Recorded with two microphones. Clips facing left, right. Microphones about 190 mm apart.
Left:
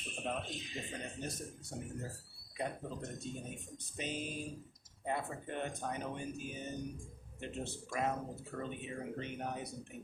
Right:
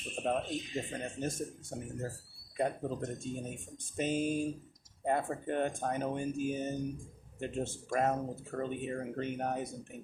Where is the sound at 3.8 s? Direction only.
45° right (ahead or behind).